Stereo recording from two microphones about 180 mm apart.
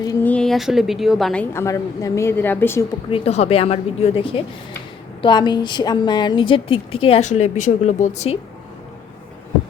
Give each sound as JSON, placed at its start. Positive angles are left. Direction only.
{"t": 0.0, "sound": "a woman's voice", "side_deg": 15}
{"t": 3.1, "sound": "a woman's voice", "side_deg": 35}